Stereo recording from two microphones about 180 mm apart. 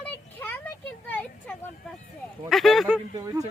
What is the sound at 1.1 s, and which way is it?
Speech, 10° left (ahead or behind).